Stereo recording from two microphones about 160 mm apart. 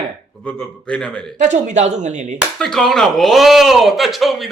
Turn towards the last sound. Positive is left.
turn(degrees=0)  # may be behind; listen again after turning